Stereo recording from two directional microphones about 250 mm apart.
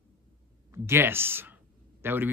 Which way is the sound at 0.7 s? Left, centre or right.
Centre.